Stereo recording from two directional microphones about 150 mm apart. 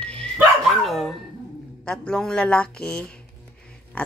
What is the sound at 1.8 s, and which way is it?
Speech, 5° left (ahead or behind).